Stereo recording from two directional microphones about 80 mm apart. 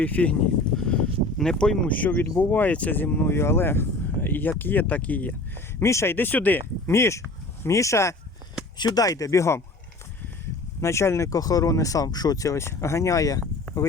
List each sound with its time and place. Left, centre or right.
0.0 s speech: centre
0.8 s a sound: centre
2.0 s speech: left
5.8 s speech: left
6.1 s speech: left
8.8 s speech: left
10.8 s speech: left